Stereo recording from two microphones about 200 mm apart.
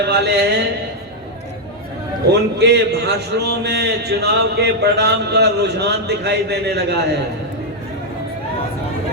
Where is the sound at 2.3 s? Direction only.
55° right (ahead or behind).